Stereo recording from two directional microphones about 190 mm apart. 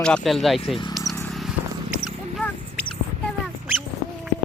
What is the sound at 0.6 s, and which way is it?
Speech, 25° left (ahead or behind).